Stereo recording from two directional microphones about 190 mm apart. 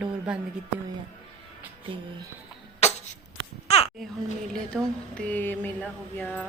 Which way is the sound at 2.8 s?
35° left (ahead or behind).